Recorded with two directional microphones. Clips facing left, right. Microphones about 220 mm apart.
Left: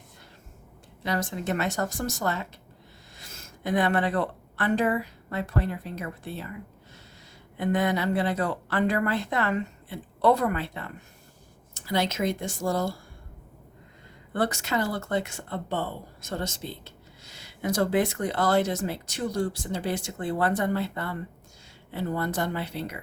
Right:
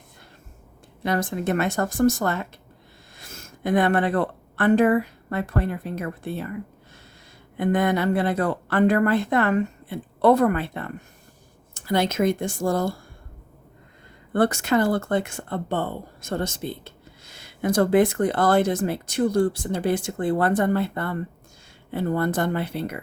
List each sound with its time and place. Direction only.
1.0 s speech: 55° right (ahead or behind)
14.3 s speech: 55° right (ahead or behind)